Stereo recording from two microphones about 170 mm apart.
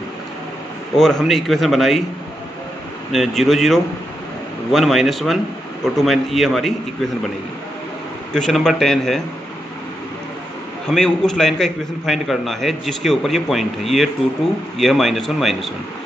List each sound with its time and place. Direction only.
0.9 s a man's voice: centre (ahead or behind)
3.1 s a man's voice: centre (ahead or behind)
8.3 s a man's voice: 5° left (ahead or behind)
10.9 s a man's voice: centre (ahead or behind)